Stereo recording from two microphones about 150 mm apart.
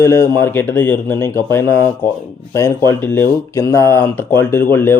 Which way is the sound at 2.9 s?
15° left (ahead or behind).